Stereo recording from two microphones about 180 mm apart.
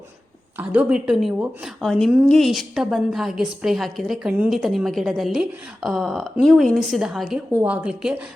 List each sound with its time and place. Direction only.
0.5 s a woman's voice: 5° right (ahead or behind)